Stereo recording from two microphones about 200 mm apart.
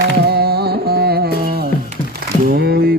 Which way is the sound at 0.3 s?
50° right (ahead or behind).